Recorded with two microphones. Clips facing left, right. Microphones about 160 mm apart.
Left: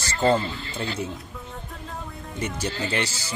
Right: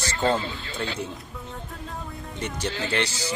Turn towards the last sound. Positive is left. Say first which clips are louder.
# even
turn(degrees=5)  # may be behind; listen again after turning